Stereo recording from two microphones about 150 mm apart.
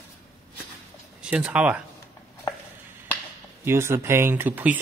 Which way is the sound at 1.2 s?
10° right (ahead or behind).